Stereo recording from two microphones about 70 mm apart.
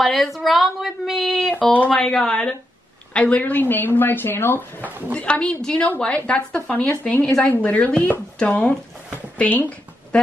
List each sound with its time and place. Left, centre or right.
0.0 s a woman's voice: centre; by 4.6 s left
4.8 s speech: right
5.1 s a woman's voice: centre